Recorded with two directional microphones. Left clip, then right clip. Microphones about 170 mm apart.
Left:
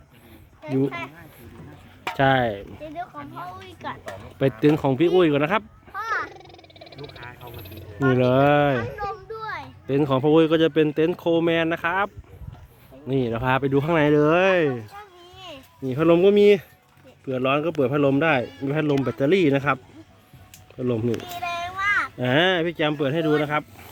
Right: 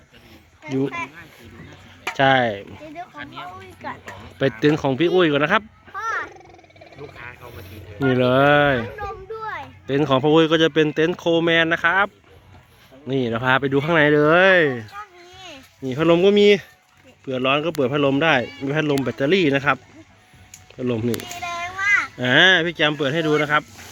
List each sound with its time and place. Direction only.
0.7 s speech: 10° left (ahead or behind)
3.8 s speech: 35° right (ahead or behind)
4.6 s speech: 5° left (ahead or behind)
5.9 s wild animals: 40° right (ahead or behind)
6.2 s frog: 15° right (ahead or behind)
7.9 s speech: 5° left (ahead or behind)
9.3 s a sound: 40° right (ahead or behind)
10.0 s speech: 5° right (ahead or behind)
19.0 s a child's voice: 10° left (ahead or behind)